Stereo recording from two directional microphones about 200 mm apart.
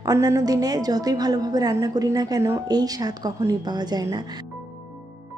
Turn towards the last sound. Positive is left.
turn(degrees=-20)  # may be behind; listen again after turning